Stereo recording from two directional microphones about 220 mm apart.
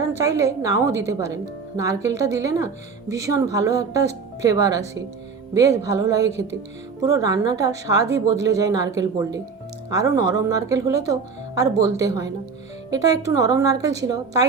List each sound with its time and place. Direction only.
0.3 s speech: 15° right (ahead or behind)